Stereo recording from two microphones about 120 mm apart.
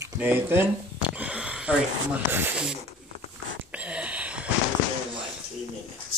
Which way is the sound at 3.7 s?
10° right (ahead or behind).